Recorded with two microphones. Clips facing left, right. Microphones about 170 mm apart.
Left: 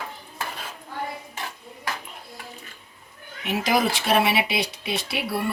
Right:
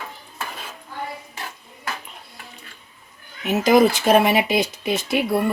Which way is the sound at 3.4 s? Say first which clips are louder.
Right 7 dB; 45° right (ahead or behind).